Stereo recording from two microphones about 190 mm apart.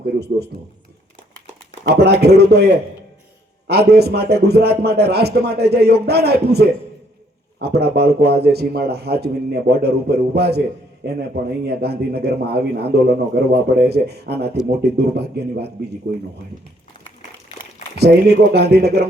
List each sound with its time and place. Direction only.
0.2 s a man's voice: 60° right (ahead or behind)
1.8 s a man's voice: 60° right (ahead or behind)
11.7 s a man's voice: 55° right (ahead or behind)
17.9 s a man's voice: 60° right (ahead or behind)